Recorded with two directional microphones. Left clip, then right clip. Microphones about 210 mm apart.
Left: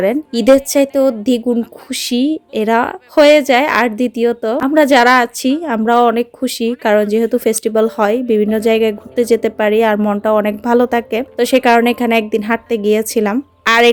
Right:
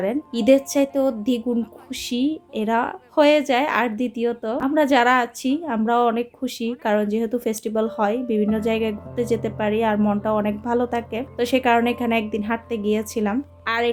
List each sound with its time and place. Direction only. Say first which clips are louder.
0.0 s a woman's voice: left 8 dB; 40° left (ahead or behind)